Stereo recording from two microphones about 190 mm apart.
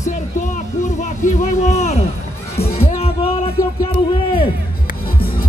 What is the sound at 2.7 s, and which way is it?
Music, 30° left (ahead or behind).